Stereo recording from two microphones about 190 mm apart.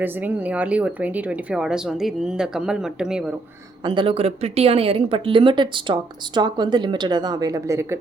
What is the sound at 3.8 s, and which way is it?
Speech, 25° right (ahead or behind).